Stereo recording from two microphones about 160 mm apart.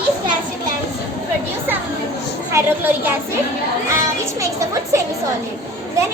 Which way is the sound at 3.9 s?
20° right (ahead or behind).